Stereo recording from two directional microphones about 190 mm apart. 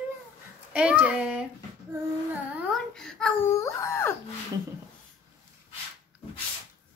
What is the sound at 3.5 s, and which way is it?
Wail, 15° left (ahead or behind).